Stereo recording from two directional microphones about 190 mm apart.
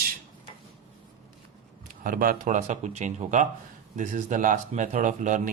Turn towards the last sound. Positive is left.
turn(degrees=-40)  # may be behind; listen again after turning